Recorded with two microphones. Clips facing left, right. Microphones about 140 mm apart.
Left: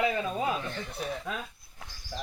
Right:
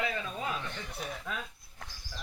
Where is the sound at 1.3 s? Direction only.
15° left (ahead or behind).